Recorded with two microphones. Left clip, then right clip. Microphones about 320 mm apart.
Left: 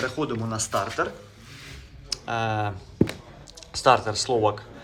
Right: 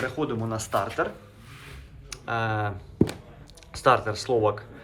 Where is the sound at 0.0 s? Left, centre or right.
Centre.